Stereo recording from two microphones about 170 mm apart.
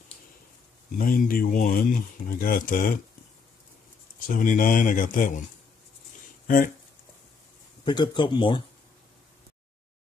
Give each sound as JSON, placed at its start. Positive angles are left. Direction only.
{"t": 0.9, "sound": "speech", "side_deg": 55}
{"t": 4.3, "sound": "speech", "side_deg": 50}
{"t": 6.4, "sound": "speech", "side_deg": 55}
{"t": 7.8, "sound": "speech", "side_deg": 25}